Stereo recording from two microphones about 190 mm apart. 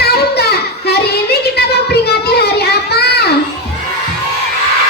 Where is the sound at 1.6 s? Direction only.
60° left (ahead or behind).